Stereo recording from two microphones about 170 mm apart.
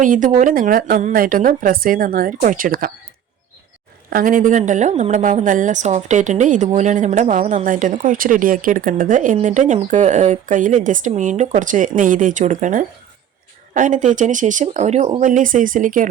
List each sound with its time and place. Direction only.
0.0 s a woman's voice: 50° right (ahead or behind)
4.1 s speech: 55° right (ahead or behind)